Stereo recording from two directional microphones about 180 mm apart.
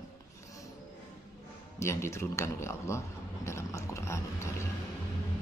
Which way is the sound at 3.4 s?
15° left (ahead or behind).